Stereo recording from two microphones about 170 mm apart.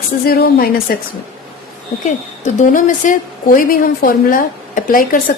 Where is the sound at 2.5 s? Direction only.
50° left (ahead or behind).